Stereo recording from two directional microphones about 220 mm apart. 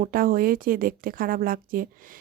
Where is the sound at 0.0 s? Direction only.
40° right (ahead or behind).